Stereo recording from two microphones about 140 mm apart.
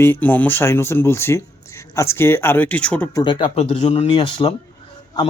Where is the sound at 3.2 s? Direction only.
35° left (ahead or behind).